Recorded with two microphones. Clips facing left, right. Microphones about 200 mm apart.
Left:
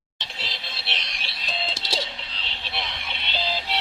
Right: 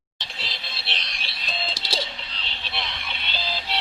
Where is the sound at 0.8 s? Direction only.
15° left (ahead or behind).